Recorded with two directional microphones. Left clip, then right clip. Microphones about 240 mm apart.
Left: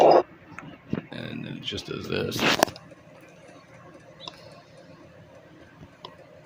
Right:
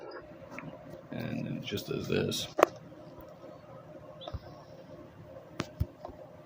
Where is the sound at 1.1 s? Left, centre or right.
Centre.